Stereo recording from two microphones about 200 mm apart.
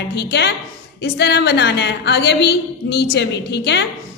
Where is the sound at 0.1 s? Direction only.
55° left (ahead or behind).